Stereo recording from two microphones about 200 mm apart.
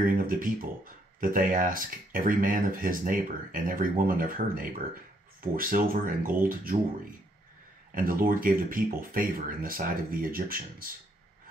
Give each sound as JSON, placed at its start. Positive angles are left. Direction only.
{"t": 0.0, "sound": "speech", "side_deg": -45}
{"t": 7.9, "sound": "speech", "side_deg": -45}